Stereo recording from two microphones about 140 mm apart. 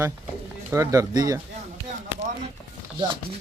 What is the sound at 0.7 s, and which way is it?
Speech, 20° right (ahead or behind).